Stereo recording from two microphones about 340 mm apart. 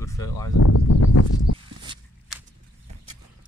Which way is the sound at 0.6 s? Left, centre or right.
Left.